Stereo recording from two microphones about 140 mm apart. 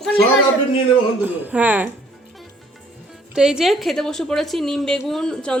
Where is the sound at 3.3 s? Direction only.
5° right (ahead or behind).